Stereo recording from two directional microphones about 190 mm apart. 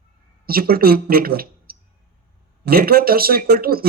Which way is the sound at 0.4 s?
50° right (ahead or behind).